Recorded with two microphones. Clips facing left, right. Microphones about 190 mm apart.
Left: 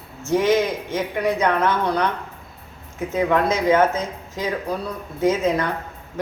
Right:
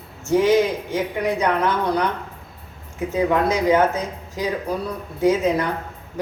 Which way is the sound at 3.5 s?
15° right (ahead or behind).